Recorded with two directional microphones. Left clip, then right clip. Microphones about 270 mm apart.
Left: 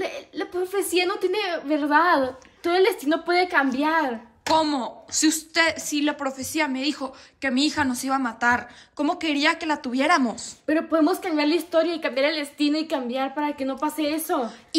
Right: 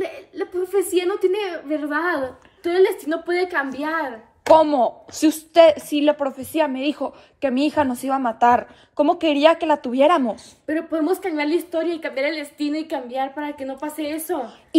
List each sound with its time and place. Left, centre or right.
0.0 s a woman's voice: left
4.6 s a woman's voice: centre
10.7 s a woman's voice: left